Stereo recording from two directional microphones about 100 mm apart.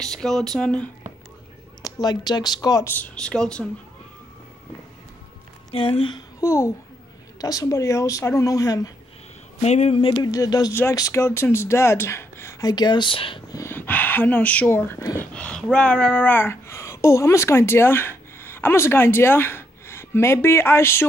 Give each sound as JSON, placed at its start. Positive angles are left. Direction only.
{"t": 0.0, "sound": "speech", "side_deg": 5}
{"t": 1.8, "sound": "speech", "side_deg": 40}
{"t": 3.0, "sound": "speech", "side_deg": 10}
{"t": 5.7, "sound": "speech", "side_deg": 60}
{"t": 6.4, "sound": "speech", "side_deg": 30}
{"t": 7.3, "sound": "speech", "side_deg": 40}
{"t": 9.6, "sound": "speech", "side_deg": 90}
{"t": 10.1, "sound": "speech", "side_deg": 40}
{"t": 10.7, "sound": "speech", "side_deg": 25}
{"t": 13.7, "sound": "speech", "side_deg": 20}
{"t": 15.3, "sound": "speech", "side_deg": 10}